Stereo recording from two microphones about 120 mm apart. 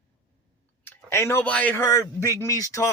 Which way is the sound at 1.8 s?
25° left (ahead or behind).